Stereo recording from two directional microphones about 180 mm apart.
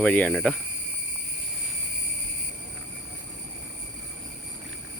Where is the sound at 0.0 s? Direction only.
5° left (ahead or behind).